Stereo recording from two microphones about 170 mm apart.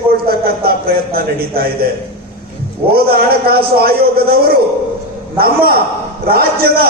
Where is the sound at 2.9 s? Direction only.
65° right (ahead or behind).